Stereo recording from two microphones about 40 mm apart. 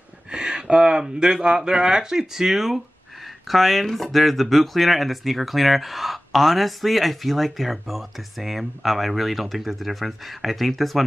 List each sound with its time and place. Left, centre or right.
0.3 s speech: right; by 11.1 s centre